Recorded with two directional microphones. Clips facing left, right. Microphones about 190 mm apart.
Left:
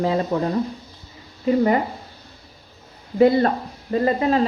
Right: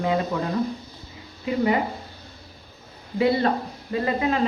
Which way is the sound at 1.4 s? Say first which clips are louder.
Left 4 dB; 40° left (ahead or behind).